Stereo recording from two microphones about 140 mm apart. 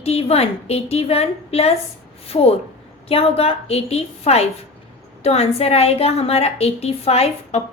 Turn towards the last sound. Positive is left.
turn(degrees=50)  # may be behind; listen again after turning